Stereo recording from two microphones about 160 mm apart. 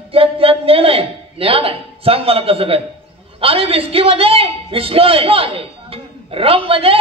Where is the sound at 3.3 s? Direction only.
35° right (ahead or behind).